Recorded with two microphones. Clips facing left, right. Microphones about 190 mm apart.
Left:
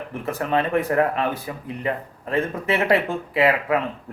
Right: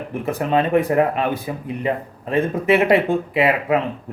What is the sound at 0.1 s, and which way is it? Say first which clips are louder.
A man's voice: right 4 dB; 15° right (ahead or behind).